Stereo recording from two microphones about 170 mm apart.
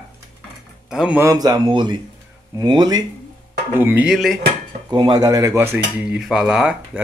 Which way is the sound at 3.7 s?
10° right (ahead or behind).